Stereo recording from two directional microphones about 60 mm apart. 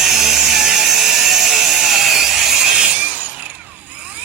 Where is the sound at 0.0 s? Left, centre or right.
Centre.